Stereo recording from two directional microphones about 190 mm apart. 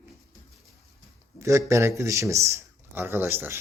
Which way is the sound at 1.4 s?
15° right (ahead or behind).